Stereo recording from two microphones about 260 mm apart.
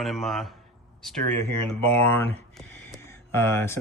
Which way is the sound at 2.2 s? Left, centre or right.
Centre.